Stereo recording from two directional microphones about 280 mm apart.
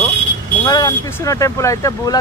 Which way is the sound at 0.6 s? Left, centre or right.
Centre.